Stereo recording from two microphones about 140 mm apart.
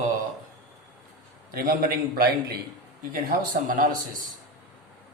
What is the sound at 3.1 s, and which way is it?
A man's voice, 85° right.